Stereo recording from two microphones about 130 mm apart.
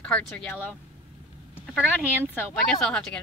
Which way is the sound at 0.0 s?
10° left (ahead or behind).